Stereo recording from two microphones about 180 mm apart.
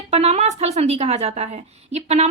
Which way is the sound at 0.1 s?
35° right (ahead or behind).